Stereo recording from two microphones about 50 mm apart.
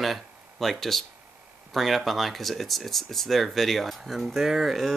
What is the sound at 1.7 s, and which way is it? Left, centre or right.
Speech, centre.